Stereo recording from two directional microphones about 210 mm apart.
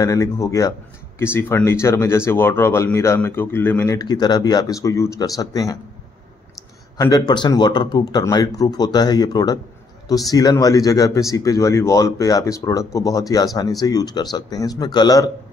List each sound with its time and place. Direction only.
0.0 s speech: 15° left (ahead or behind)
7.0 s speech: 20° left (ahead or behind)